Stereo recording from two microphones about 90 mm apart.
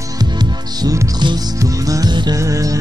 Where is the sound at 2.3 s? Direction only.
35° right (ahead or behind).